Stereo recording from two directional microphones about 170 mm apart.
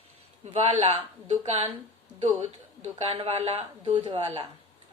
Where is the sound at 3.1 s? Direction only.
35° right (ahead or behind).